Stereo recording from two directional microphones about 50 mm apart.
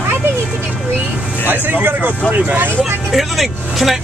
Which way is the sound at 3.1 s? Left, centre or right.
Centre.